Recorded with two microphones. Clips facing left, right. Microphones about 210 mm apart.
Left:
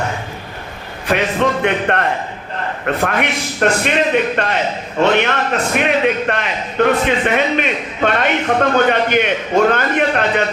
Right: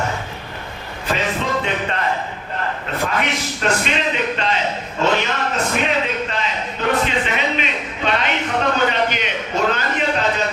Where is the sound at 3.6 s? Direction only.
55° left (ahead or behind).